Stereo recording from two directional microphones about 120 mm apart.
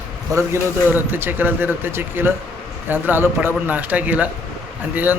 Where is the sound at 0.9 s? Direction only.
15° right (ahead or behind).